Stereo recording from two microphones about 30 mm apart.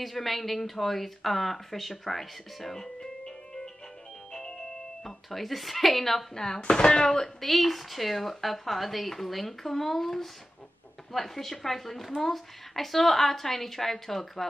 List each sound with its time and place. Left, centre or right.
0.0 s speech: centre
5.0 s speech: centre
6.6 s speech: left
7.3 s a woman's voice: centre